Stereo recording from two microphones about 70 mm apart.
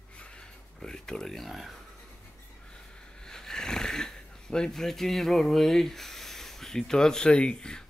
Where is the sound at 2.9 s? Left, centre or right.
Centre.